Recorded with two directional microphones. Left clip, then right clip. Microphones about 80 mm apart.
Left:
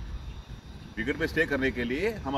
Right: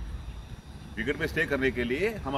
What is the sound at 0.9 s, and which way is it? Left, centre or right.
Speech, right.